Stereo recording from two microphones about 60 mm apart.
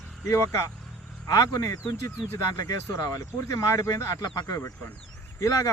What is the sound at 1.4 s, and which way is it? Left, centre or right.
Speech, left.